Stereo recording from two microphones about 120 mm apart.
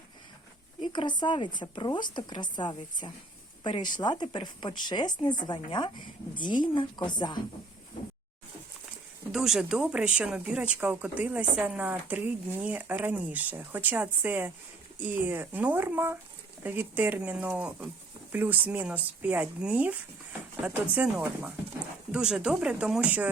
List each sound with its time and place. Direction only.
0.9 s speech: 40° left (ahead or behind)
9.3 s speech: 5° right (ahead or behind)